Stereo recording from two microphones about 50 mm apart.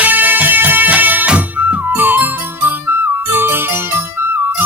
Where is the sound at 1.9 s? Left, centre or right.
Right.